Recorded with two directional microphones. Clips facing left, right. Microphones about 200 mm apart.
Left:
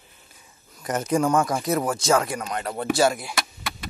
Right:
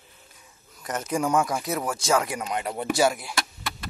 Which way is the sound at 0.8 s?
Centre (ahead or behind).